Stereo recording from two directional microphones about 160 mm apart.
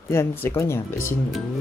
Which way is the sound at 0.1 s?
15° left (ahead or behind).